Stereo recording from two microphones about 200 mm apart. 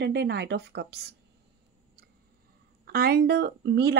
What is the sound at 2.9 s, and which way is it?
Speech, 50° right (ahead or behind).